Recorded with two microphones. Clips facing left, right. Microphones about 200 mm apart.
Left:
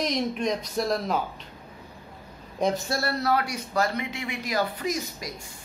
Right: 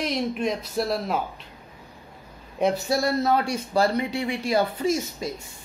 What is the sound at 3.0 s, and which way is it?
Speech, 25° right (ahead or behind).